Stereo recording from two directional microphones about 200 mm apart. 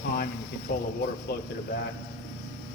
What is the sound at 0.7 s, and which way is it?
Speech, 50° left (ahead or behind).